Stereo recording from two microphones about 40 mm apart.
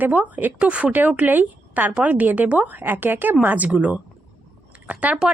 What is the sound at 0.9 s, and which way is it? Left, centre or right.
Speech, right.